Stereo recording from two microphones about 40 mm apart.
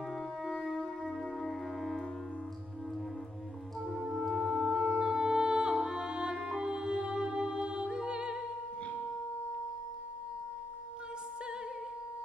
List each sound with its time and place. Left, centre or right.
0.1 s music: centre
0.7 s music: centre
4.1 s music: centre
4.7 s music: right